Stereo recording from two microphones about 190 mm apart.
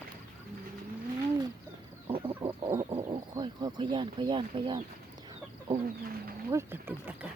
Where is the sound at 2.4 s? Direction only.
15° right (ahead or behind).